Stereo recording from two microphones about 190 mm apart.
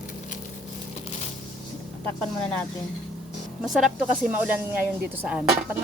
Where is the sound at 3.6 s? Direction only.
5° right (ahead or behind).